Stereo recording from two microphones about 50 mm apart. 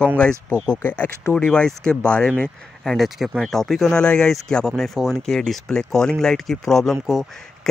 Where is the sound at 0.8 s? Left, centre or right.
Left.